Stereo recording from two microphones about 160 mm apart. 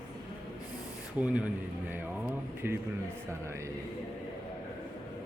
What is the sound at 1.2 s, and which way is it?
Speech, 10° right (ahead or behind).